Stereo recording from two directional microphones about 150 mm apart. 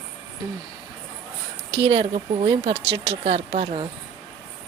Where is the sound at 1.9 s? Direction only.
35° right (ahead or behind).